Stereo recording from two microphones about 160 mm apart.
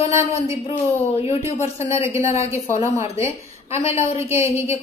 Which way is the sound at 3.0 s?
15° right (ahead or behind).